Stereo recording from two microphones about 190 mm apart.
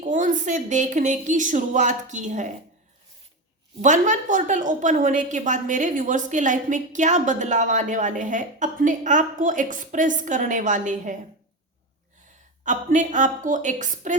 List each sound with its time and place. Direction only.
0.0 s speech: 40° right (ahead or behind)
3.8 s a woman's voice: 40° right (ahead or behind)
12.6 s a woman's voice: 40° right (ahead or behind)